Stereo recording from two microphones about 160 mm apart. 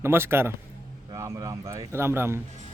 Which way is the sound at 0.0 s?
15° right (ahead or behind).